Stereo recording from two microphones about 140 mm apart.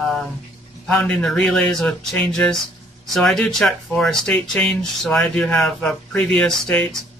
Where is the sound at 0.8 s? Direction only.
5° left (ahead or behind).